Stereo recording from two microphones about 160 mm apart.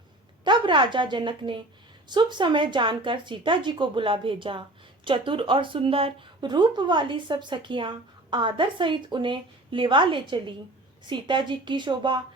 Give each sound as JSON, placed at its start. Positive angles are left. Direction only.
{"t": 0.4, "sound": "a woman's voice", "side_deg": -30}